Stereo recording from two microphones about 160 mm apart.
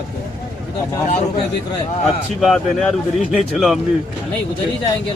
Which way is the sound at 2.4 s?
Centre (ahead or behind).